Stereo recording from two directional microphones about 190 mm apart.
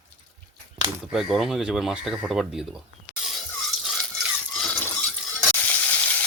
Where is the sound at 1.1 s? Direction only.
Centre (ahead or behind).